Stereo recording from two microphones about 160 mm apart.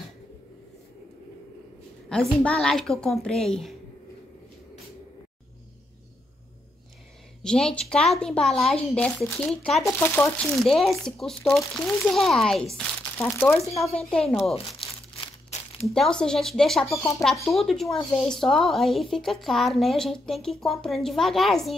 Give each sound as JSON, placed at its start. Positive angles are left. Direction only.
{"t": 2.0, "sound": "a woman's voice", "side_deg": 5}
{"t": 7.4, "sound": "a woman's voice", "side_deg": 5}
{"t": 9.9, "sound": "speech", "side_deg": 15}
{"t": 10.5, "sound": "a woman's voice", "side_deg": 0}
{"t": 15.9, "sound": "a woman's voice", "side_deg": 5}
{"t": 16.9, "sound": "speech", "side_deg": 20}
{"t": 17.2, "sound": "a woman's voice", "side_deg": 0}